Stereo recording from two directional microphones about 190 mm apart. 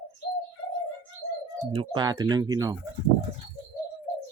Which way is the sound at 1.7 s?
25° right (ahead or behind).